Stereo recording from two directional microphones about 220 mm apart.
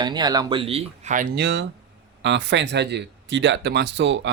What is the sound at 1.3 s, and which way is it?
Speech, 55° right (ahead or behind).